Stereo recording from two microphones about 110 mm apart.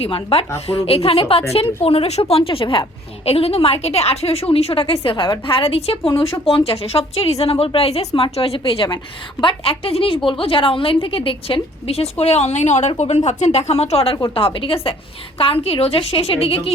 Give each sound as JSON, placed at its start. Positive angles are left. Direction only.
{"t": 0.0, "sound": "a woman's voice", "side_deg": 60}
{"t": 3.2, "sound": "a woman's voice", "side_deg": 65}